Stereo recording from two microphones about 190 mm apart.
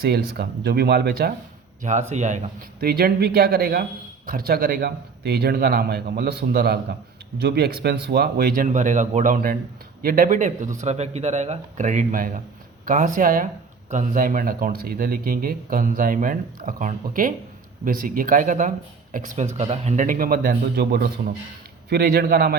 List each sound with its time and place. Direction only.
0.0 s a man's voice: 60° right (ahead or behind)
1.8 s a man's voice: 40° right (ahead or behind); by 22.5 s 55° right (ahead or behind)